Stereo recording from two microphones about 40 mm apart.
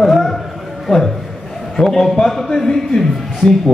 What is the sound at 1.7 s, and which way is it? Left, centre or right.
A man's voice, centre.